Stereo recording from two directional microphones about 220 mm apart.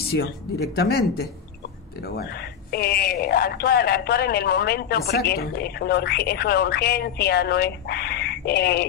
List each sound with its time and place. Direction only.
0.1 s speech: 45° left (ahead or behind)
2.7 s speech: 45° left (ahead or behind)